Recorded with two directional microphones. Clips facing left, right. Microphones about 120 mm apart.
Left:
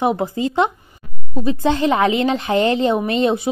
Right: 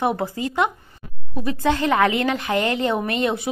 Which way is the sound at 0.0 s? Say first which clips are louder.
Left 4 dB; 20° left (ahead or behind).